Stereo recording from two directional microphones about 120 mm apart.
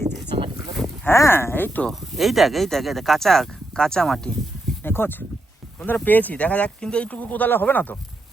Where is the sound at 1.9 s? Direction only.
Centre (ahead or behind).